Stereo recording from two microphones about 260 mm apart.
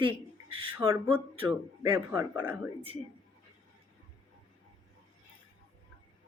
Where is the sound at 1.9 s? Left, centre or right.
Centre.